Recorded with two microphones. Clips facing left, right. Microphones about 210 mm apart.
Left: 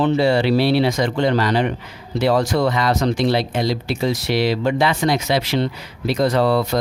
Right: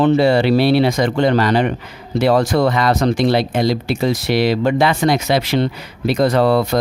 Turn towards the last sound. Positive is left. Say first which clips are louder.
# right 3 dB
turn(degrees=-55)  # may be behind; listen again after turning